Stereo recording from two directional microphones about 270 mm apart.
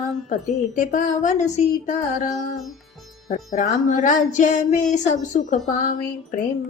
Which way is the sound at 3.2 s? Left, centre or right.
Left.